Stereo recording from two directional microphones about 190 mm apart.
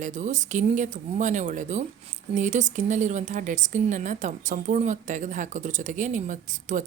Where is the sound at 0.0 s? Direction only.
40° right (ahead or behind).